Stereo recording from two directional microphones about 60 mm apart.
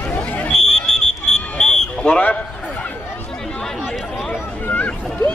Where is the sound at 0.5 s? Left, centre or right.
Centre.